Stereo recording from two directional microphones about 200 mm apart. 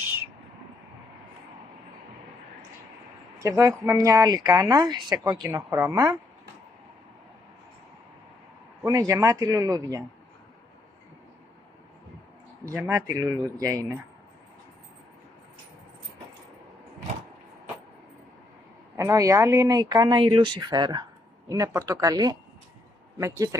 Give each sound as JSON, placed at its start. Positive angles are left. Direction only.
{"t": 3.3, "sound": "speech", "side_deg": -15}
{"t": 8.8, "sound": "speech", "side_deg": -15}
{"t": 12.6, "sound": "speech", "side_deg": -15}
{"t": 18.9, "sound": "speech", "side_deg": -15}